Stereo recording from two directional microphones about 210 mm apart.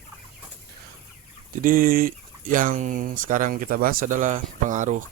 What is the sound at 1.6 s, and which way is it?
Speech, 40° right (ahead or behind).